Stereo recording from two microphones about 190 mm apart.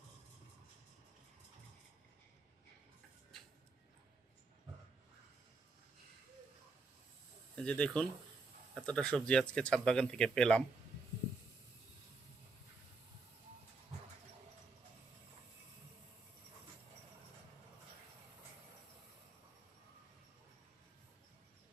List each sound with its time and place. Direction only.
7.5 s speech: 5° left (ahead or behind)